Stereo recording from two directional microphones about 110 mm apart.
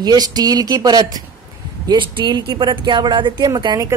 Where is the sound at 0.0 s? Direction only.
40° right (ahead or behind).